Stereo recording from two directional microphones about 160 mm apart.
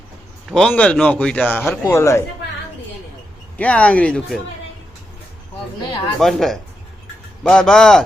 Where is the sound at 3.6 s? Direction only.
10° left (ahead or behind).